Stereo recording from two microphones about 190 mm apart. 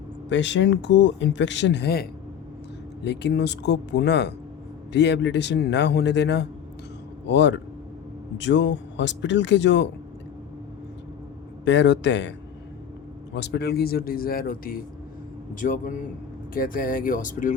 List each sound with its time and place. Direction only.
0.3 s a man's voice: 70° left (ahead or behind)
11.6 s speech: 70° left (ahead or behind)
13.3 s speech: 65° left (ahead or behind); by 17.5 s 45° left (ahead or behind)